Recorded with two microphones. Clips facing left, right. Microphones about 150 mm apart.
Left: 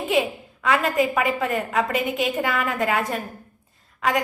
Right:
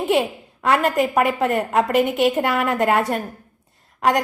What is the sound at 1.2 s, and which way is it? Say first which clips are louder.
Speech: right 4 dB; 50° right (ahead or behind).